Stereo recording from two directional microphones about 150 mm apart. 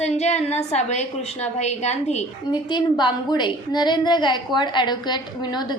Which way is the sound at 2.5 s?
30° left (ahead or behind).